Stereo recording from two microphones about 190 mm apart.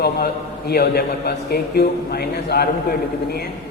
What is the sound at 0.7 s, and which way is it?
A man's voice, 55° left (ahead or behind).